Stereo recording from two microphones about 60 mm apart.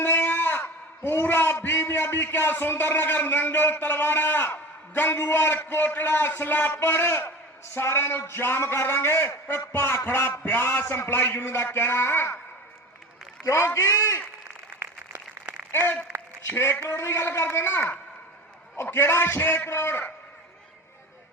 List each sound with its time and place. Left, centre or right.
0.0 s a man's voice: left
13.4 s a man's voice: left
16.5 s a man's voice: left
17.6 s a man's voice: left